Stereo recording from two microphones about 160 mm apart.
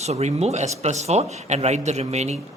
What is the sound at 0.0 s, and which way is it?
Speech, 45° right (ahead or behind).